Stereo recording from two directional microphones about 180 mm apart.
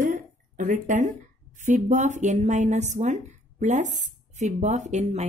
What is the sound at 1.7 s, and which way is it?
Speech, 45° right (ahead or behind).